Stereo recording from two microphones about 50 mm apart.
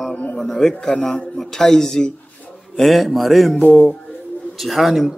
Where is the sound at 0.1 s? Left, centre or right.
Left.